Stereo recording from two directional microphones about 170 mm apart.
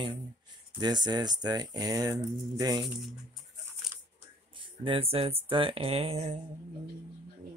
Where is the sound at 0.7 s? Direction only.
25° right (ahead or behind).